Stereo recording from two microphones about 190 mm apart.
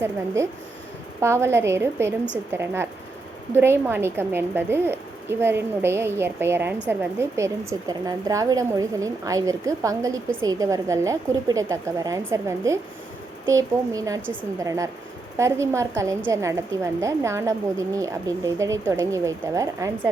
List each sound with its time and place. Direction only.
1.2 s a woman's voice: 15° right (ahead or behind)